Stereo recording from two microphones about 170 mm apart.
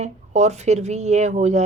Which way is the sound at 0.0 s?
40° right (ahead or behind).